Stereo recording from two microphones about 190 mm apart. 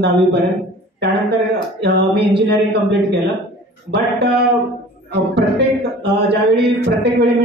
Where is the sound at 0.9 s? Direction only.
60° right (ahead or behind).